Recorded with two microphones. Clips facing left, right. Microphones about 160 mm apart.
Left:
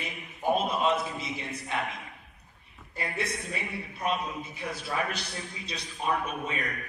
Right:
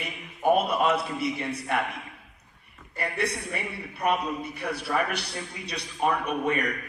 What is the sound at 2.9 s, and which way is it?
A man's voice, 65° right (ahead or behind).